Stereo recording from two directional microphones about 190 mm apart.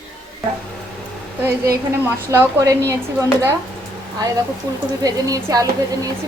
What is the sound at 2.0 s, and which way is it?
A woman's voice, 10° right (ahead or behind).